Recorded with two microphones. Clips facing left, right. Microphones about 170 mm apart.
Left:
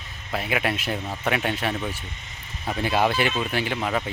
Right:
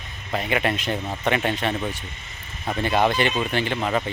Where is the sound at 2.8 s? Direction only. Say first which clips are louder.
Right 2 dB; 5° left (ahead or behind).